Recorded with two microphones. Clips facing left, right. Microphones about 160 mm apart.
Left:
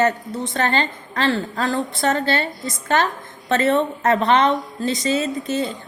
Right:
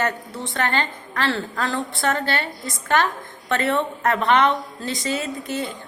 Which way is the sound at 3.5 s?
20° left (ahead or behind).